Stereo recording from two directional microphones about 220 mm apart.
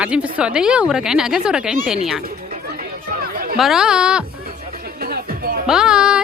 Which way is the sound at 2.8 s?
40° right (ahead or behind).